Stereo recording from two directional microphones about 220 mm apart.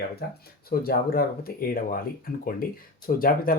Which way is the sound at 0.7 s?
45° left (ahead or behind).